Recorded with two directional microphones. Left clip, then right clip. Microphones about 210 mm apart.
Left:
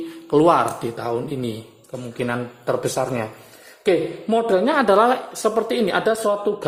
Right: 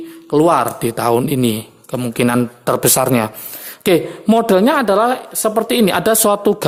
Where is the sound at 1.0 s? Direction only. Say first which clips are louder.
Right 13 dB; 35° right (ahead or behind).